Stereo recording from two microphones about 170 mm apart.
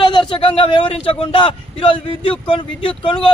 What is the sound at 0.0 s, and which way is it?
Speech, 30° left (ahead or behind).